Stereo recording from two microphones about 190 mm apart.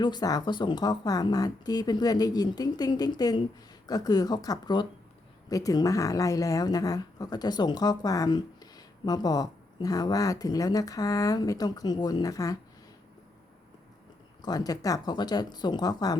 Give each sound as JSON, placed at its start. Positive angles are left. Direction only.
{"t": 0.0, "sound": "speech", "side_deg": 20}
{"t": 14.4, "sound": "speech", "side_deg": 20}